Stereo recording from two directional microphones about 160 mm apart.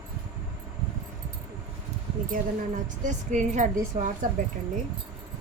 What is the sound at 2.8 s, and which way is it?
A woman's voice, 50° right (ahead or behind).